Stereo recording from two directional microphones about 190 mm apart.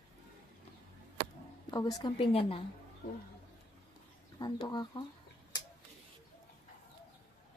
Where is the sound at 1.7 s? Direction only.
25° left (ahead or behind).